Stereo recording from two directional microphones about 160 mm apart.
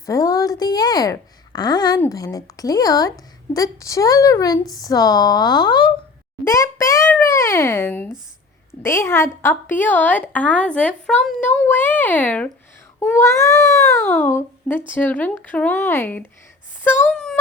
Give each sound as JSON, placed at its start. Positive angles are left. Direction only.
{"t": 0.0, "sound": "a woman's voice", "side_deg": 20}